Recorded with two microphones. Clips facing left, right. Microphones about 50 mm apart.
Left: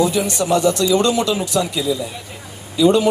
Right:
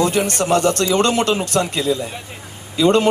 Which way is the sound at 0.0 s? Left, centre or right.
Right.